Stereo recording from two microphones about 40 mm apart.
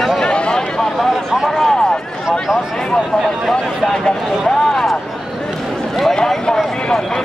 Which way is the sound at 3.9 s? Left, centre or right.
Centre.